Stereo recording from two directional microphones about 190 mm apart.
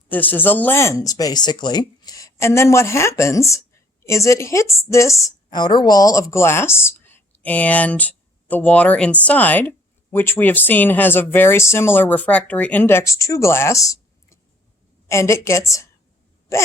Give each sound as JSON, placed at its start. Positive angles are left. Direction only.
{"t": 0.1, "sound": "speech", "side_deg": 10}